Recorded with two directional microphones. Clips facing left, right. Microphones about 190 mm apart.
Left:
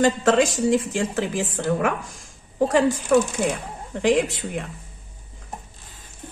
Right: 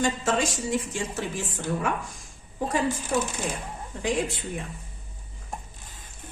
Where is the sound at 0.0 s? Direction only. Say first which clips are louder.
Left 7 dB; 75° left (ahead or behind).